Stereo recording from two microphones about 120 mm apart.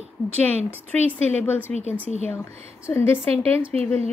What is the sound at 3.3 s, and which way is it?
Speech, 60° right (ahead or behind).